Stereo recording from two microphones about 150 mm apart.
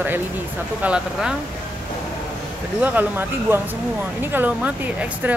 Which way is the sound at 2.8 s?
10° right (ahead or behind).